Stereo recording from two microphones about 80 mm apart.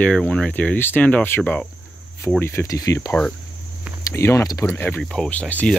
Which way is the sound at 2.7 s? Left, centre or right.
Left.